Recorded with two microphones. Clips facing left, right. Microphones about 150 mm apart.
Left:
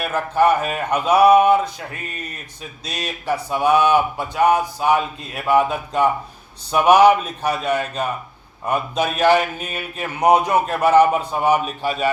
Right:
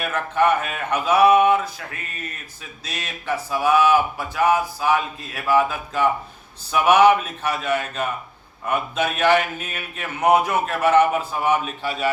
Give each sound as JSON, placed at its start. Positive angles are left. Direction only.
{"t": 0.1, "sound": "speech", "side_deg": 35}
{"t": 2.8, "sound": "speech", "side_deg": 35}
{"t": 11.8, "sound": "a man's voice", "side_deg": 15}